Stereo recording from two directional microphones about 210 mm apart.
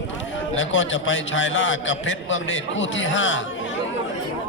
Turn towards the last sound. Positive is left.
turn(degrees=65)  # may be behind; listen again after turning